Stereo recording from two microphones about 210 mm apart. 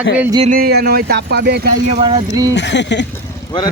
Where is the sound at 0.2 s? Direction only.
15° right (ahead or behind).